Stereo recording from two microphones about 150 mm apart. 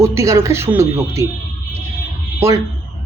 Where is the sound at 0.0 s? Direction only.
20° right (ahead or behind).